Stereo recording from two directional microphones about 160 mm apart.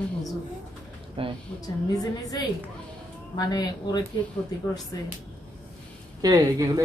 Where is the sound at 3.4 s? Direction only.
25° left (ahead or behind).